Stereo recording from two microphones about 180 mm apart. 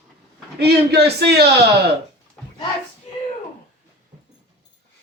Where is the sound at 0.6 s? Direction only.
65° right (ahead or behind).